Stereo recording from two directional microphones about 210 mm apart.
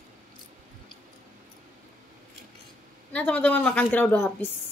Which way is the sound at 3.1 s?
5° left (ahead or behind).